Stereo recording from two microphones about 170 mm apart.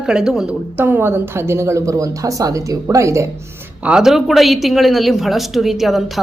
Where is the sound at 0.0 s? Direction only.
5° right (ahead or behind).